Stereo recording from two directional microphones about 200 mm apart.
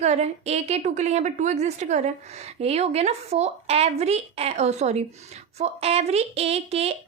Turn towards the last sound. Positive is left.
turn(degrees=-30)  # may be behind; listen again after turning